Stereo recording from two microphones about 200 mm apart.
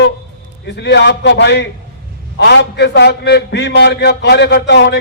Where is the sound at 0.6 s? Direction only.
60° left (ahead or behind).